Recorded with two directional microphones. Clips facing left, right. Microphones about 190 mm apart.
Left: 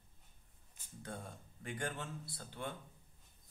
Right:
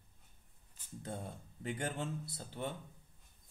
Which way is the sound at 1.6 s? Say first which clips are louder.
Right 4 dB; 25° right (ahead or behind).